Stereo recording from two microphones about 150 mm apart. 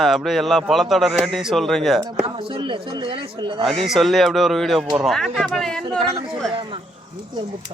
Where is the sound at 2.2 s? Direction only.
40° right (ahead or behind).